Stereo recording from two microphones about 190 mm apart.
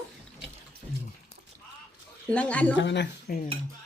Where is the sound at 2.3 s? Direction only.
5° left (ahead or behind).